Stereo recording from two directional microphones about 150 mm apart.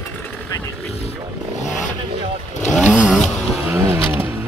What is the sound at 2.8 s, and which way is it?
Vehicle, 5° right (ahead or behind).